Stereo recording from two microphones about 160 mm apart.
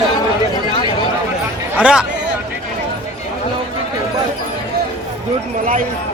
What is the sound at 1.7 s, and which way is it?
Speech, 5° right (ahead or behind).